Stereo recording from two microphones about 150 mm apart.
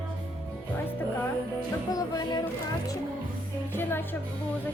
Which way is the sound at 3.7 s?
15° left (ahead or behind).